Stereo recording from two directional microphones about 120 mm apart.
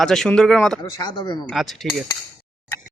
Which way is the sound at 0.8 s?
35° left (ahead or behind).